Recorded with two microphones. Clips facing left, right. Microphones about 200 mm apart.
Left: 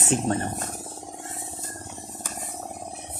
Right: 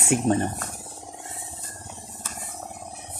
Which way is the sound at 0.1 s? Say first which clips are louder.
Right 2 dB; 10° right (ahead or behind).